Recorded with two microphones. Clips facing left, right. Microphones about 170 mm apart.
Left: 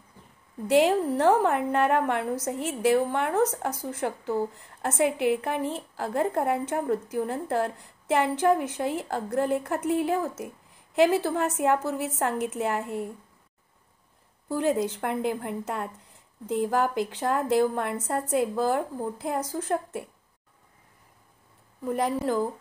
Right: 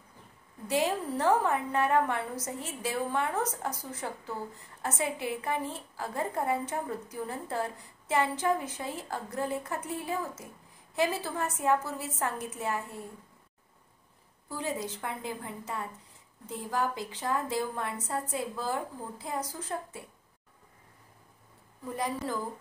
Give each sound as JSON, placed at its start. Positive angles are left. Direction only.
{"t": 0.7, "sound": "a woman's voice", "side_deg": 70}
{"t": 14.6, "sound": "a woman's voice", "side_deg": 75}
{"t": 21.8, "sound": "a woman's voice", "side_deg": 65}